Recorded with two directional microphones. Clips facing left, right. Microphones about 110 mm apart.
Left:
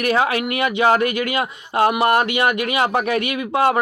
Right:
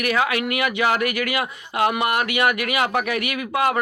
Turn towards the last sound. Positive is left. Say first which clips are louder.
# left 4 dB
turn(degrees=25)  # may be behind; listen again after turning